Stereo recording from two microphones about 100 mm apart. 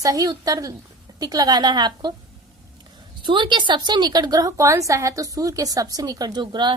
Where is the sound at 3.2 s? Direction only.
50° right (ahead or behind).